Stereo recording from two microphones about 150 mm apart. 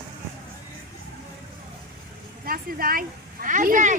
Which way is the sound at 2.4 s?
75° right (ahead or behind).